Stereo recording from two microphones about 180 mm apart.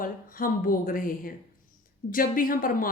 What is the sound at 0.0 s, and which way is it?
Speech, 50° left (ahead or behind).